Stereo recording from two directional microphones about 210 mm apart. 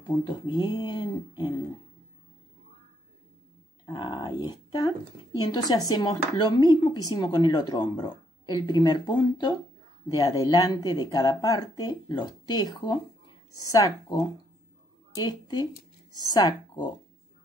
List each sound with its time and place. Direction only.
0.5 s speech: 20° left (ahead or behind)
3.8 s a woman's voice: 20° left (ahead or behind)
16.1 s speech: 20° right (ahead or behind)
16.3 s speech: 20° left (ahead or behind)